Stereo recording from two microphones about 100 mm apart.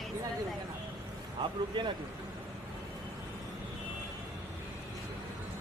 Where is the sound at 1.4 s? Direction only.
50° right (ahead or behind).